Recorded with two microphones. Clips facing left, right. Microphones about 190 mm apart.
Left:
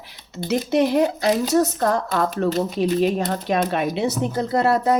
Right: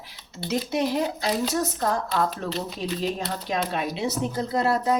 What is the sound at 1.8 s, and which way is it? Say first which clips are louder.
A woman's voice: left 4 dB; 55° left (ahead or behind).